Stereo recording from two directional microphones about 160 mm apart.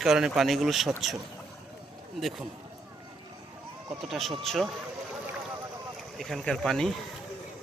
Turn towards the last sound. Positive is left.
turn(degrees=0)  # may be behind; listen again after turning